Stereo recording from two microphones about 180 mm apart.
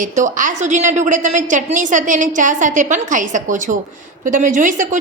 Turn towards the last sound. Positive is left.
turn(degrees=-45)  # may be behind; listen again after turning